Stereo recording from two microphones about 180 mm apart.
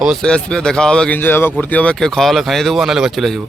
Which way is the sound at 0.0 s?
Centre (ahead or behind).